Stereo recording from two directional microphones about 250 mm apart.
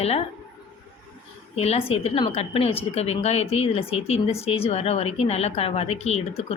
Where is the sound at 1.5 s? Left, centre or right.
Left.